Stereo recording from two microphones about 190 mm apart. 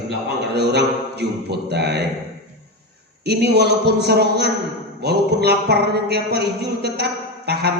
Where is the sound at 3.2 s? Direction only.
60° right (ahead or behind).